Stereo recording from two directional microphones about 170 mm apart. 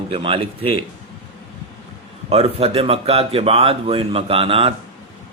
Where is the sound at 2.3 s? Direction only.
35° right (ahead or behind).